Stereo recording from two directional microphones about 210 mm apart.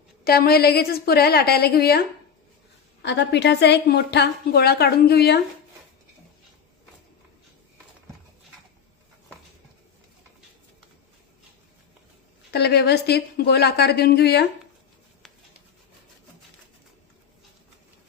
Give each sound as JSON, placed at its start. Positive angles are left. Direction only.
{"t": 0.3, "sound": "a woman's voice", "side_deg": 50}
{"t": 12.5, "sound": "a woman's voice", "side_deg": 50}